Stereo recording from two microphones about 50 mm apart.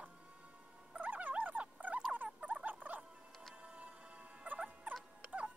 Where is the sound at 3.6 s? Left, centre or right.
Right.